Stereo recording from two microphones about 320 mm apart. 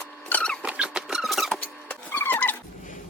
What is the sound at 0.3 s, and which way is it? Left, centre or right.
Rodents, centre.